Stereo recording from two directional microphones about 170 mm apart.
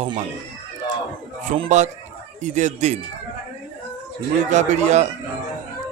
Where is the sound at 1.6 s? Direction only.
45° right (ahead or behind).